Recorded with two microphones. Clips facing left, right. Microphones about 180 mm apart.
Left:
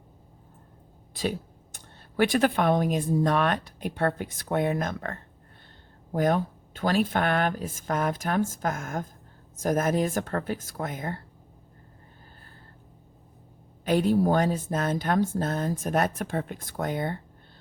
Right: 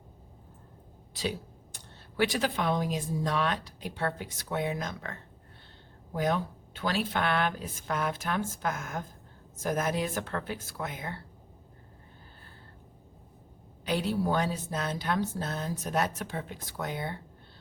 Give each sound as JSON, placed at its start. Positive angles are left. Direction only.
{"t": 1.1, "sound": "speech", "side_deg": 50}
{"t": 6.1, "sound": "a woman's voice", "side_deg": 50}
{"t": 13.8, "sound": "a woman's voice", "side_deg": 50}